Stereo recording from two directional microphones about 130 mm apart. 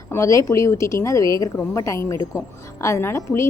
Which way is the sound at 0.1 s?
25° left (ahead or behind).